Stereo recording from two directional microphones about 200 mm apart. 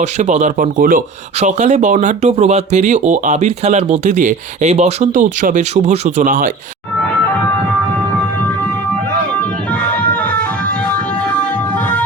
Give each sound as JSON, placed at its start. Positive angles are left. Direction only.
{"t": 0.0, "sound": "speech", "side_deg": -35}